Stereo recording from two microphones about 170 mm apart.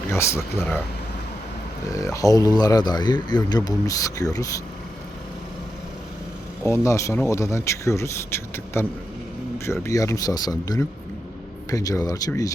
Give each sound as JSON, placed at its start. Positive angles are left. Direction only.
{"t": 0.1, "sound": "a man's voice", "side_deg": 15}
{"t": 1.9, "sound": "speech", "side_deg": 20}
{"t": 6.7, "sound": "a man's voice", "side_deg": 20}